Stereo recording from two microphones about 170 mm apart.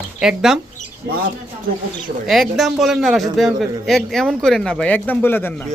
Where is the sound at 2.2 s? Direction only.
Centre (ahead or behind).